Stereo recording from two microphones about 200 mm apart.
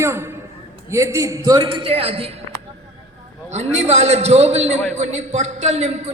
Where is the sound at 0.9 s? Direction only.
15° right (ahead or behind).